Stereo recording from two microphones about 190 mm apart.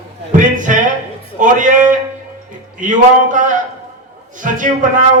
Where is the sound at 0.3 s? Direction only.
40° right (ahead or behind).